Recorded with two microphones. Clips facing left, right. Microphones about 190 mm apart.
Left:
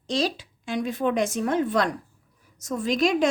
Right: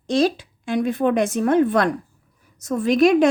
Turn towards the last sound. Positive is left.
turn(degrees=-60)  # may be behind; listen again after turning